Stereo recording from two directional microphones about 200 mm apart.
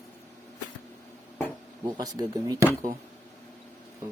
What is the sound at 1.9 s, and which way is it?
Speech, 20° right (ahead or behind).